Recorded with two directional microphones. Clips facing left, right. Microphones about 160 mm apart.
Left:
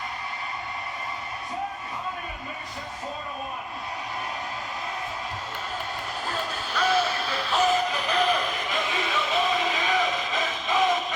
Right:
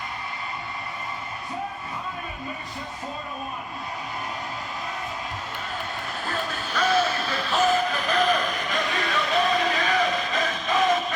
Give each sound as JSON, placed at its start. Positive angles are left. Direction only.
{"t": 6.2, "sound": "music", "side_deg": 10}
{"t": 7.7, "sound": "music", "side_deg": 20}